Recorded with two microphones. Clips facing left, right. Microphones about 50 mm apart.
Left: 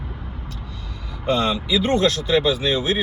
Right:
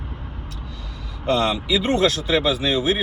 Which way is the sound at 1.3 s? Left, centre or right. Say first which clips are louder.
Even; centre.